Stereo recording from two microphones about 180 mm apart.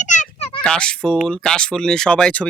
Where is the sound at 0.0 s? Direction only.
45° left (ahead or behind).